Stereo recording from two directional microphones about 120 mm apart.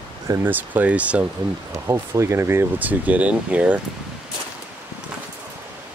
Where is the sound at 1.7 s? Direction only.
25° right (ahead or behind).